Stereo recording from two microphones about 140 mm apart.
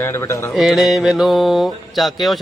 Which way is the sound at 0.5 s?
Centre (ahead or behind).